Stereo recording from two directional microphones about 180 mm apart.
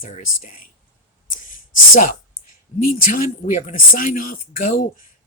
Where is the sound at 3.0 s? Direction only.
45° left (ahead or behind).